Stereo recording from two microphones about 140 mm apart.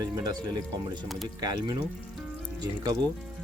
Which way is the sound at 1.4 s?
25° right (ahead or behind).